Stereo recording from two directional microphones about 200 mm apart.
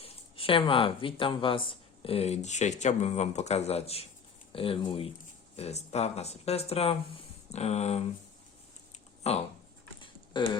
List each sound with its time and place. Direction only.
0.0 s speech: 25° left (ahead or behind)
9.2 s speech: 30° left (ahead or behind)
10.0 s a sound: 25° left (ahead or behind)